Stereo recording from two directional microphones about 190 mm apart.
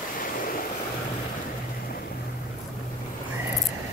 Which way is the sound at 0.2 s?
45° left (ahead or behind).